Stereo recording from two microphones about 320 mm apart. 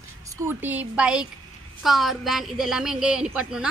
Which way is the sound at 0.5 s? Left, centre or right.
Centre.